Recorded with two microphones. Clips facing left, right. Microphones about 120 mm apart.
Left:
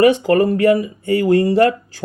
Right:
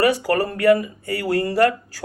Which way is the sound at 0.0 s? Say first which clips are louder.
Left 6 dB; 25° left (ahead or behind).